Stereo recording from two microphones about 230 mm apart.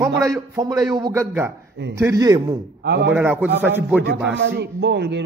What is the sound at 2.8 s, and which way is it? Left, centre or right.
Speech, right.